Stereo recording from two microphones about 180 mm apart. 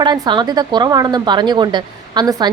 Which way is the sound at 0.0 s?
25° right (ahead or behind).